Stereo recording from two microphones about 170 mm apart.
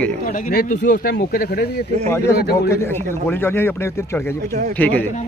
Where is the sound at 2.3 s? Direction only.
70° left (ahead or behind).